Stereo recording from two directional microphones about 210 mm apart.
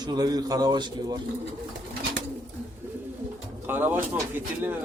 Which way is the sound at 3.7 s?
10° right (ahead or behind).